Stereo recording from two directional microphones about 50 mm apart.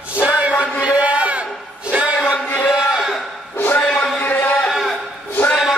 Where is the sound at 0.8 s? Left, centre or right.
Right.